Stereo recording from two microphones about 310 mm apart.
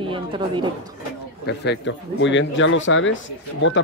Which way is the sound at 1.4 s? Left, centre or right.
Left.